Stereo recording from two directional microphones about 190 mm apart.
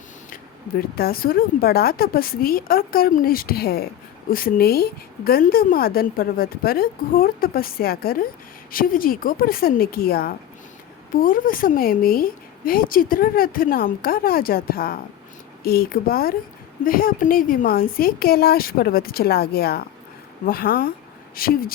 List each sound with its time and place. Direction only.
0.9 s a woman's voice: 50° left (ahead or behind)